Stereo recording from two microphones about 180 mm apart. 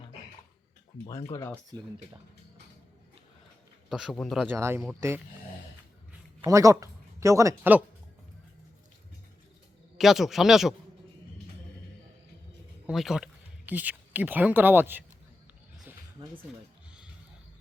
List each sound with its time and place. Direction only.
1.0 s speech: 15° left (ahead or behind)
3.8 s speech: centre (ahead or behind)
4.5 s speech: 15° right (ahead or behind)
6.4 s speech: 15° right (ahead or behind)
10.0 s speech: centre (ahead or behind)
12.9 s speech: centre (ahead or behind)
16.5 s speech: centre (ahead or behind)